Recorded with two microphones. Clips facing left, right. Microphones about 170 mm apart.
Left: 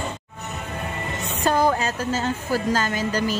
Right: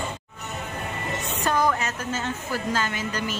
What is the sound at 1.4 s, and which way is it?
A woman's voice, 30° left (ahead or behind).